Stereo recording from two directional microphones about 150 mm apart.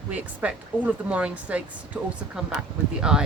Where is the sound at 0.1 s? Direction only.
10° right (ahead or behind).